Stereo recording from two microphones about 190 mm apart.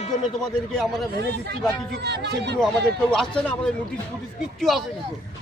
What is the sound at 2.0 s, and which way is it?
Speech, 60° right (ahead or behind).